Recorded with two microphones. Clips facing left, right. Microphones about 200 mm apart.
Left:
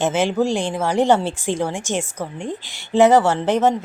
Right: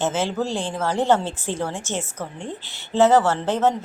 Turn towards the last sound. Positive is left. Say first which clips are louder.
# left 3 dB
turn(degrees=15)  # may be behind; listen again after turning